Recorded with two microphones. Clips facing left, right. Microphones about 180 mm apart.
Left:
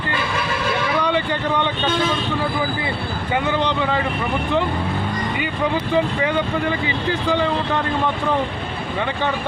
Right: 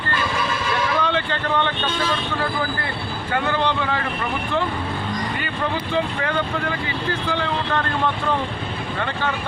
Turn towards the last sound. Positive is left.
turn(degrees=15)  # may be behind; listen again after turning